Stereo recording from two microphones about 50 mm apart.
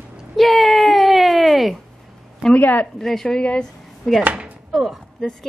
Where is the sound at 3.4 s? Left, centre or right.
Left.